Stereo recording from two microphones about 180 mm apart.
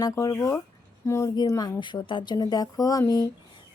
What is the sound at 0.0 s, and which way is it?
Speech, 20° left (ahead or behind).